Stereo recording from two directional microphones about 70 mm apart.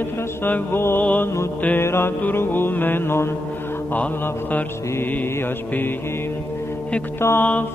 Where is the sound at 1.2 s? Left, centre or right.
Left.